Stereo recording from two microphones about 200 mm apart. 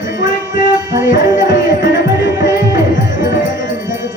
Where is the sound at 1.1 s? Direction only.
40° left (ahead or behind).